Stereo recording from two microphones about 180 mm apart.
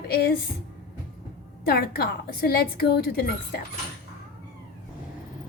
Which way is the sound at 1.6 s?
60° left (ahead or behind).